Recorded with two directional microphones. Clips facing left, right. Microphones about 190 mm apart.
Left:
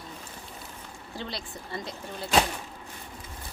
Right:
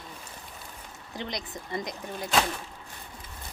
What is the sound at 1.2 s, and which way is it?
Speech, 15° right (ahead or behind).